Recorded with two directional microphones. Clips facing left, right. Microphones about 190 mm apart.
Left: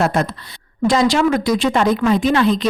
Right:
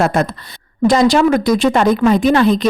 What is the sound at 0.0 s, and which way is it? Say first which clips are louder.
A woman's voice: right 2 dB; 50° right (ahead or behind).